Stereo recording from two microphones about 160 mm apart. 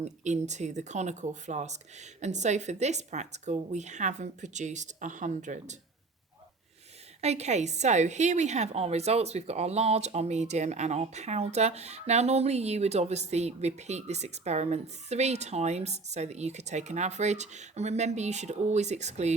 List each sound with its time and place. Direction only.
0.0 s a woman's voice: 45° right (ahead or behind)
7.2 s a woman's voice: 45° right (ahead or behind)